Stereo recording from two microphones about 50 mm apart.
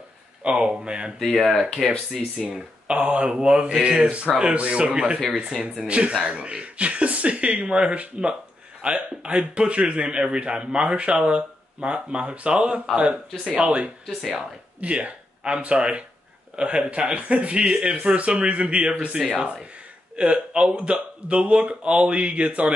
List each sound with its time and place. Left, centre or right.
0.4 s a man's voice: centre
1.2 s speech: centre
2.4 s a man's voice: right
14.0 s speech: centre
14.8 s a man's voice: right
20.2 s a man's voice: right